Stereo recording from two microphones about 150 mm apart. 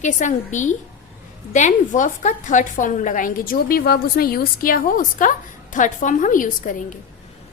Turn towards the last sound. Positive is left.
turn(degrees=60)  # may be behind; listen again after turning